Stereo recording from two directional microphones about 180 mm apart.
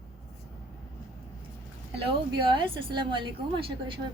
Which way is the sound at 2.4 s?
25° right (ahead or behind).